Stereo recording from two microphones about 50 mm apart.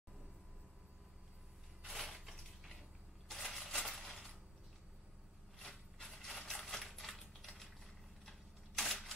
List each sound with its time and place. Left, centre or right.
1.9 s a sound: centre
5.6 s rub: centre
6.0 s typewriter: centre